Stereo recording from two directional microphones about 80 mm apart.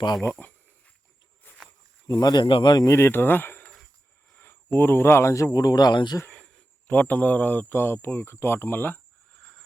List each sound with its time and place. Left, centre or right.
0.4 s speech: centre
2.0 s speech: left
2.8 s speech: left
6.3 s speech: centre